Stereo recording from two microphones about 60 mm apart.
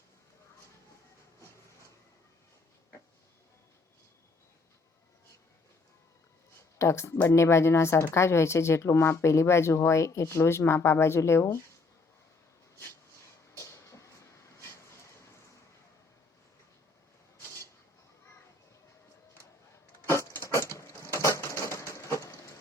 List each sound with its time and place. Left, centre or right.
6.7 s speech: left
13.6 s vehicle: left
20.0 s vehicle: left
20.3 s mechanisms: left